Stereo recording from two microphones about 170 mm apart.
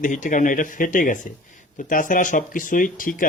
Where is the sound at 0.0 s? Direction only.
50° left (ahead or behind).